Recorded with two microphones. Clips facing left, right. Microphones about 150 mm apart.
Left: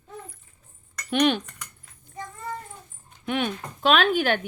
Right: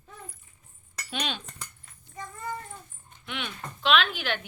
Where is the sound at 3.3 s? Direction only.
45° left (ahead or behind).